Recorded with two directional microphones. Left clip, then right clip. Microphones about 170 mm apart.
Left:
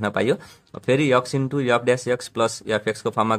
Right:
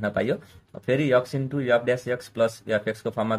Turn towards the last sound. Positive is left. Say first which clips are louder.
# left 5 dB
turn(degrees=45)  # may be behind; listen again after turning